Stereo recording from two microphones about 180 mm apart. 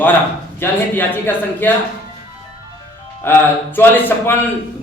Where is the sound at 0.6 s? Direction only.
10° left (ahead or behind).